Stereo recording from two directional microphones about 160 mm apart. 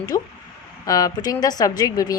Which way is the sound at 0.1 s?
20° left (ahead or behind).